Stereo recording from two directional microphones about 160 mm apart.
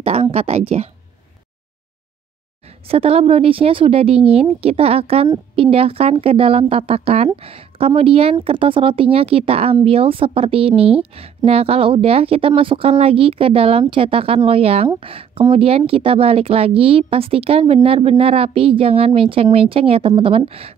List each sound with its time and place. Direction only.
0.0 s speech: 40° right (ahead or behind)
2.9 s speech: 40° right (ahead or behind)